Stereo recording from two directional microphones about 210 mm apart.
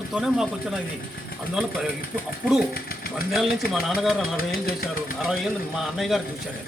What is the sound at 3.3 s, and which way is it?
Speech, centre (ahead or behind).